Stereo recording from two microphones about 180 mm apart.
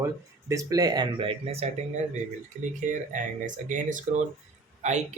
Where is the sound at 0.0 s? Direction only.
15° right (ahead or behind); by 1.7 s 35° right (ahead or behind).